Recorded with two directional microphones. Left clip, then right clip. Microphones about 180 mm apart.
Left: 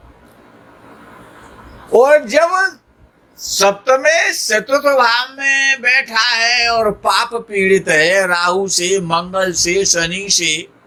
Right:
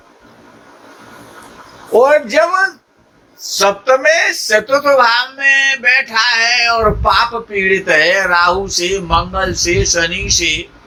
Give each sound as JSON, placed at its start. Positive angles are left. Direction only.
{"t": 1.9, "sound": "speech", "side_deg": 55}